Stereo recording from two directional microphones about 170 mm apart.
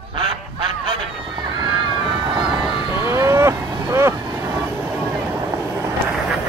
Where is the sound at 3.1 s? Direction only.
15° right (ahead or behind).